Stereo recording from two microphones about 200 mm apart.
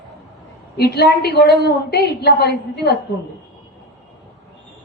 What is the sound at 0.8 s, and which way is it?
A woman's voice, 55° left (ahead or behind).